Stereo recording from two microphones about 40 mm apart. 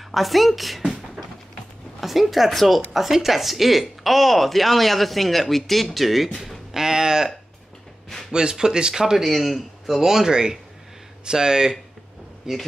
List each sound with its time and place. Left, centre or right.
0.1 s speech: centre
6.7 s speech: centre